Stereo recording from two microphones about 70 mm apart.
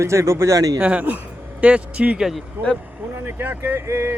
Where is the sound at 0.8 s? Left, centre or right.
Right.